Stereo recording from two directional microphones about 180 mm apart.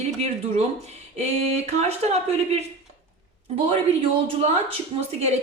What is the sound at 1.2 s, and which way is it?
A woman's voice, 35° right (ahead or behind).